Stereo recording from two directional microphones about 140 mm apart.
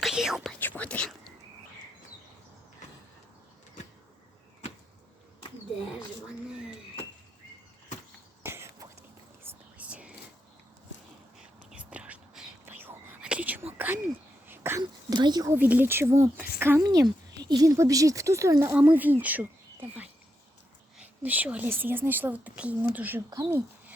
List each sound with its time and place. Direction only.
0.0 s whispering: 5° right (ahead or behind)
0.6 s whispering: 10° left (ahead or behind)
6.2 s a sound: 5° right (ahead or behind)
8.4 s a sound: 20° right (ahead or behind)
9.4 s whispering: 15° right (ahead or behind)
11.3 s whispering: 10° right (ahead or behind)
13.7 s a sound: 15° right (ahead or behind)
14.8 s whispering: 30° right (ahead or behind)
15.4 s a woman's voice: 15° right (ahead or behind)